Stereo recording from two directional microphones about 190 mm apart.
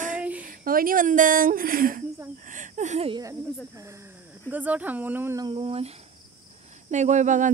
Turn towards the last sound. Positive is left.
turn(degrees=-40)  # may be behind; listen again after turning